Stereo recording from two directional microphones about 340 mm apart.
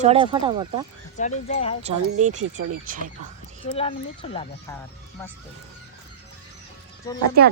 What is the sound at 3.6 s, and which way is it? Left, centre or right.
Speech, centre.